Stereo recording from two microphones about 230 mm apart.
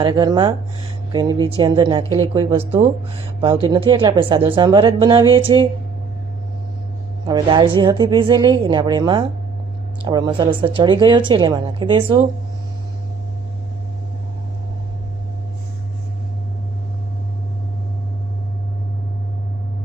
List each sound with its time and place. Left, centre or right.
0.0 s speech: centre
7.3 s speech: right